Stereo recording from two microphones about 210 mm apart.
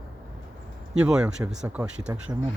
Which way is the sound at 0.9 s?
5° right (ahead or behind).